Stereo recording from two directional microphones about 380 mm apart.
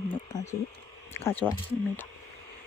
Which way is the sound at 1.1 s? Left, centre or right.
Centre.